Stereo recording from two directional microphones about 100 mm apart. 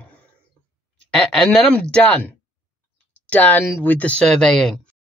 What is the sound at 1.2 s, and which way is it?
Speech, 5° left (ahead or behind).